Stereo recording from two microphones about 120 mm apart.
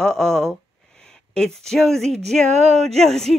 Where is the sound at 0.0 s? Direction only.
5° left (ahead or behind).